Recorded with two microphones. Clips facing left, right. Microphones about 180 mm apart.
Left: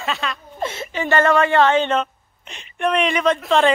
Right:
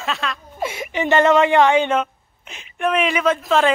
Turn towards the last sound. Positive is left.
turn(degrees=-5)  # may be behind; listen again after turning